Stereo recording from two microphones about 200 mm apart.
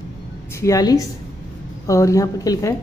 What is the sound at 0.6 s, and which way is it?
A woman's voice, 15° left (ahead or behind).